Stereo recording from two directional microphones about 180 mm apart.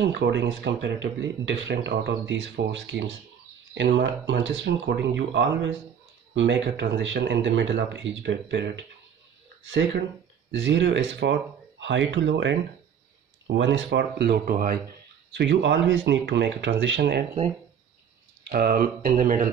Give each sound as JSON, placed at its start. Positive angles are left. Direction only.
{"t": 0.0, "sound": "speech", "side_deg": -70}
{"t": 10.5, "sound": "speech", "side_deg": -90}
{"t": 15.3, "sound": "speech", "side_deg": -75}
{"t": 18.5, "sound": "speech", "side_deg": -55}